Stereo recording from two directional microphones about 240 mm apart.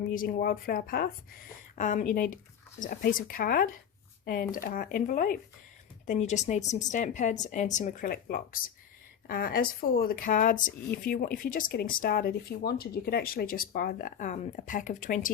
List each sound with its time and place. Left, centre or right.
0.1 s a woman's voice: left